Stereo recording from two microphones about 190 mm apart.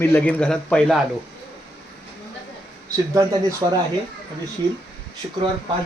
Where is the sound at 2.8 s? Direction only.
20° right (ahead or behind).